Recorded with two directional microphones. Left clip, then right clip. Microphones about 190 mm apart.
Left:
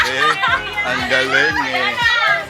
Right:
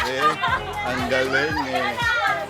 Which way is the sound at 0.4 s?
20° right (ahead or behind).